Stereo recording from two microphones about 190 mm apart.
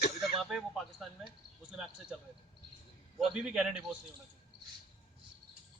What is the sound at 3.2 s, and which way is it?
Speech, 5° right (ahead or behind).